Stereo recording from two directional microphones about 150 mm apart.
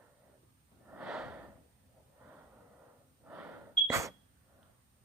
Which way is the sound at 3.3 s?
10° right (ahead or behind).